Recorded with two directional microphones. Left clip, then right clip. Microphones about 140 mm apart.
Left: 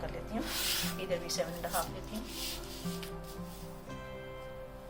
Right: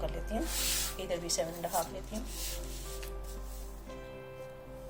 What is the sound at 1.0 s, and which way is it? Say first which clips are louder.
Speech: right 2 dB; 35° right (ahead or behind).